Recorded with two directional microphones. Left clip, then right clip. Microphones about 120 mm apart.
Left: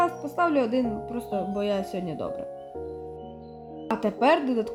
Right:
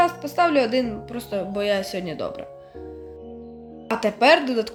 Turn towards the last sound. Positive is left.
turn(degrees=40)  # may be behind; listen again after turning